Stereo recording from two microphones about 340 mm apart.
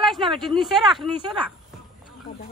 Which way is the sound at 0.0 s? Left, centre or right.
Centre.